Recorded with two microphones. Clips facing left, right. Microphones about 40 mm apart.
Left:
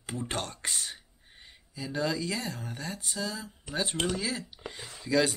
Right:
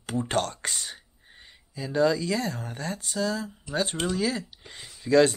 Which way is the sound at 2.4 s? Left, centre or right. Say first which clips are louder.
Right 5 dB; right.